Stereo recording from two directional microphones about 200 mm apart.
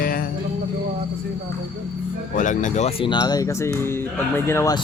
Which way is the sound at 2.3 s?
40° left (ahead or behind).